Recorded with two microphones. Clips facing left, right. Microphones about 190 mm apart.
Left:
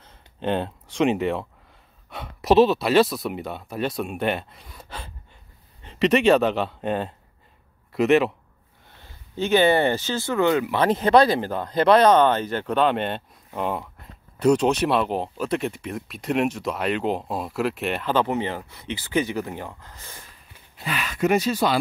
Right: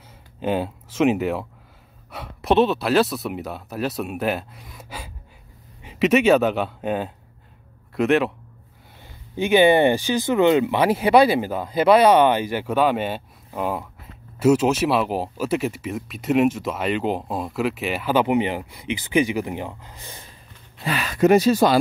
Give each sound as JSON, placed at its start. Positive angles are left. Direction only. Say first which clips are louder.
{"t": 0.4, "sound": "a man's voice", "louder": "right 2 dB", "side_deg": -5}
{"t": 9.0, "sound": "speech", "louder": "right 2 dB", "side_deg": -15}
{"t": 20.8, "sound": "speech", "louder": "right 5 dB", "side_deg": -40}